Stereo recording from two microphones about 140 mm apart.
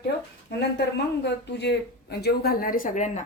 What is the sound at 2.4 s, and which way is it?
Speech, 90° left.